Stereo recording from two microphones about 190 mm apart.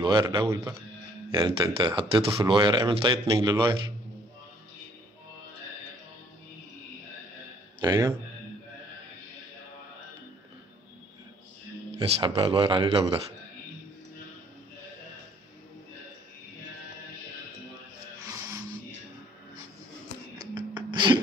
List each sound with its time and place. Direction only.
0.0 s speech: 25° right (ahead or behind)
7.8 s speech: 15° right (ahead or behind)
12.0 s speech: 30° right (ahead or behind)
20.3 s a sound: 20° right (ahead or behind)